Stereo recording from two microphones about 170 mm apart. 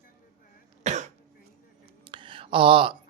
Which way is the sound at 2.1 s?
30° right (ahead or behind).